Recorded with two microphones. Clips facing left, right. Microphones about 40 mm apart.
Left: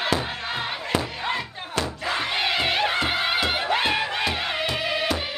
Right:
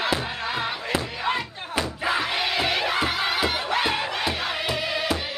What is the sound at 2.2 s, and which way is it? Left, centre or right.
Crowd, centre.